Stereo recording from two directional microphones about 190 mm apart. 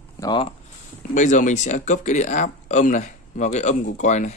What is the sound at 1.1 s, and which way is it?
Speech, 40° left (ahead or behind).